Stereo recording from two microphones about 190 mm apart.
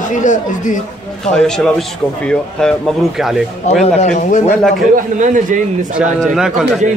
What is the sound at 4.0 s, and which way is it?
Speech, 40° left (ahead or behind).